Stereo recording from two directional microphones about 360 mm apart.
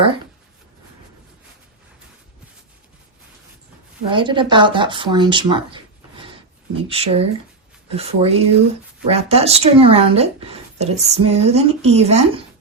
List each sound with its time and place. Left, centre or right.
4.1 s speech: centre
6.2 s a sound: centre
7.9 s speech: centre